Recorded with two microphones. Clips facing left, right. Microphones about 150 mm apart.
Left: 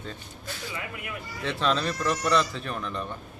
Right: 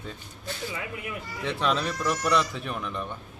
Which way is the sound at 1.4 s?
10° right (ahead or behind).